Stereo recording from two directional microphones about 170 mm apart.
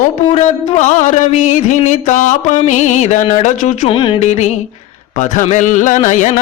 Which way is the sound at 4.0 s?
30° left (ahead or behind).